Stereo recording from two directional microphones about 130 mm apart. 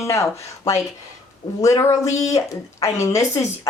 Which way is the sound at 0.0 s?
20° left (ahead or behind).